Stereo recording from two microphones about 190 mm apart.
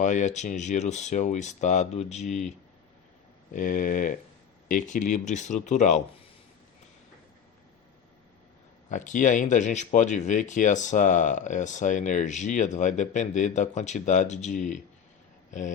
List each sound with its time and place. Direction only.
0.0 s speech: 40° left (ahead or behind)
3.5 s speech: 45° left (ahead or behind)
8.9 s speech: 40° left (ahead or behind)